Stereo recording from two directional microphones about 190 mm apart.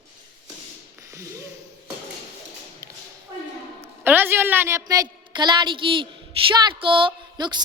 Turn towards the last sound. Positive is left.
turn(degrees=-25)  # may be behind; listen again after turning